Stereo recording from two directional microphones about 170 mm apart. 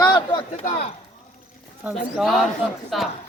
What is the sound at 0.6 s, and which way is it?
Speech, 40° left (ahead or behind).